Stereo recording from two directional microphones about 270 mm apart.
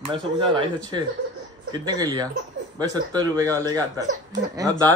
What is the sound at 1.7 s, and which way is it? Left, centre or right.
Speech, centre.